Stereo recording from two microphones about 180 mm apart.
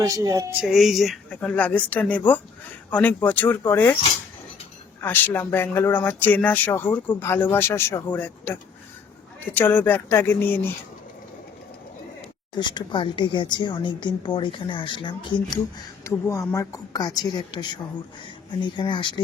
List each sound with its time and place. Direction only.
0.0 s speech: 20° right (ahead or behind)
0.6 s speech: centre (ahead or behind)
4.9 s speech: 10° left (ahead or behind)
9.6 s speech: 10° left (ahead or behind)
12.5 s a woman's voice: 25° left (ahead or behind)
16.0 s a woman's voice: 15° left (ahead or behind)